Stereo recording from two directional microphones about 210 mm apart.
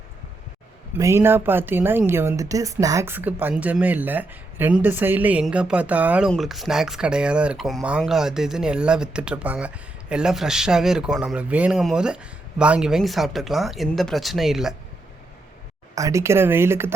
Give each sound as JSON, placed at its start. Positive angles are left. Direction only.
{"t": 0.9, "sound": "a woman's voice", "side_deg": -15}
{"t": 16.0, "sound": "speech", "side_deg": -15}